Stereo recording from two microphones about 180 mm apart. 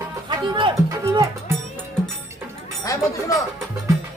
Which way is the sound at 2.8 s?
20° left (ahead or behind).